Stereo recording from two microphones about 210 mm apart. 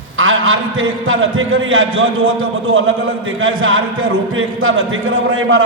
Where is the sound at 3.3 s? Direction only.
70° right (ahead or behind).